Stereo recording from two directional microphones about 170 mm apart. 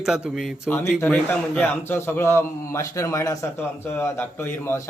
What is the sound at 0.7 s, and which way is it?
A man's voice, 15° left (ahead or behind).